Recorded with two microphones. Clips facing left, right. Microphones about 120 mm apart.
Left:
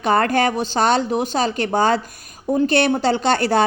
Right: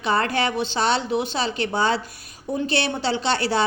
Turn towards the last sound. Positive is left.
turn(degrees=50)  # may be behind; listen again after turning